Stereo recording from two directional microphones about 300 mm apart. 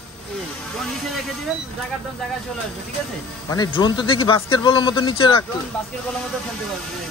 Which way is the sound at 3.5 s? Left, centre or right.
Centre.